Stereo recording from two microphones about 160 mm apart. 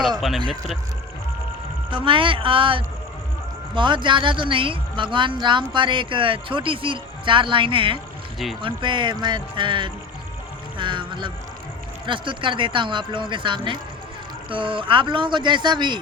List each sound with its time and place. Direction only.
0.2 s speech: centre (ahead or behind)
1.9 s a woman's voice: 30° right (ahead or behind)